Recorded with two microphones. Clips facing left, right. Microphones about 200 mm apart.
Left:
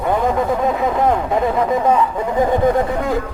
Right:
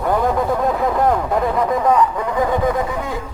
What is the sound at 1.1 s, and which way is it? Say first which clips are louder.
Speech: left 1 dB; 20° left (ahead or behind).